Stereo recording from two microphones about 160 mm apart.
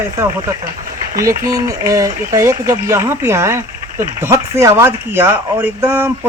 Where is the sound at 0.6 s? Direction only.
60° right (ahead or behind).